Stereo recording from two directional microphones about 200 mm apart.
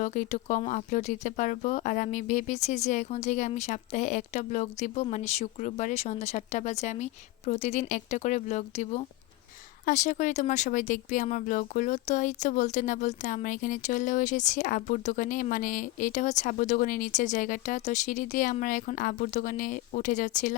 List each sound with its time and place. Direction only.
0.0 s speech: 40° left (ahead or behind)